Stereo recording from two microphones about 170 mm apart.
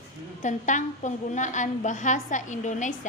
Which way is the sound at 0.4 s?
45° left (ahead or behind).